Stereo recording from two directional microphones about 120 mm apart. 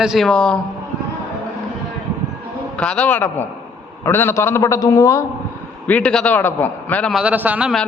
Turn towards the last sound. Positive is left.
turn(degrees=-10)  # may be behind; listen again after turning